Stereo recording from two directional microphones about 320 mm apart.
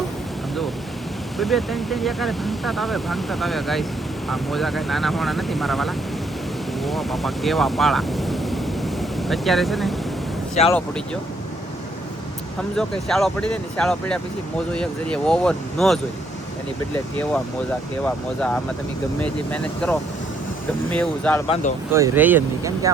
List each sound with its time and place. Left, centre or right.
1.4 s speech: centre
12.7 s speech: centre
18.0 s speech: centre
19.8 s speech: centre
21.4 s speech: centre
21.9 s speech: centre